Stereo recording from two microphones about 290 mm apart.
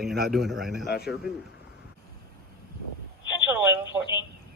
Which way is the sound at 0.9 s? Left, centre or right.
Left.